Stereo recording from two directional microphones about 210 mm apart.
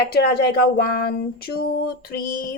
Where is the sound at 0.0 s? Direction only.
50° left (ahead or behind).